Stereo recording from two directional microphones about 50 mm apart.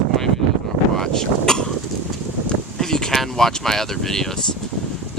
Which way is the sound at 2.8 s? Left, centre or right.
Centre.